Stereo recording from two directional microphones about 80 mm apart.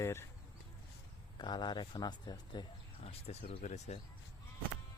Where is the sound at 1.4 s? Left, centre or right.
Left.